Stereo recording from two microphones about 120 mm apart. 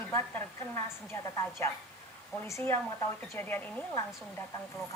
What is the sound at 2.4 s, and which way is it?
A woman's voice, 20° left (ahead or behind).